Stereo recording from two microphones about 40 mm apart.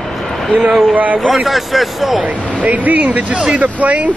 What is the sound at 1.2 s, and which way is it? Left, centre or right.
Speech, centre.